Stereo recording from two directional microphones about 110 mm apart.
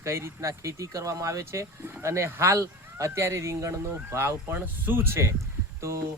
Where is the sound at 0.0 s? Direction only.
25° right (ahead or behind).